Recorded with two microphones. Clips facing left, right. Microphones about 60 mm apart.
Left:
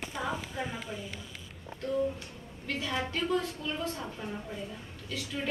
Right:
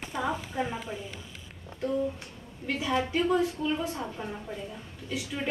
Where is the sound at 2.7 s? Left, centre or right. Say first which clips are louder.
Right 5 dB; centre.